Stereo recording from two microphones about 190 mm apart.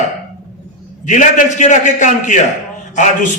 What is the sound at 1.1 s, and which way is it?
A man's voice, 40° left (ahead or behind).